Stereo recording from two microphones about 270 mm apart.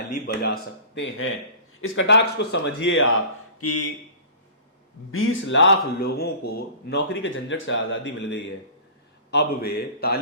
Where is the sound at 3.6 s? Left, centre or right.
Left.